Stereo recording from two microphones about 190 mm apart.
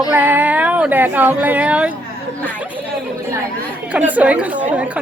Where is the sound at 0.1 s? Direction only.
10° right (ahead or behind).